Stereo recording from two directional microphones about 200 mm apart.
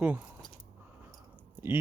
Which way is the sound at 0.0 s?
5° right (ahead or behind).